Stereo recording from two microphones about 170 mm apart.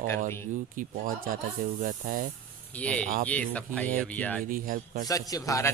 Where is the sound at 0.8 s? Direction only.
55° right (ahead or behind).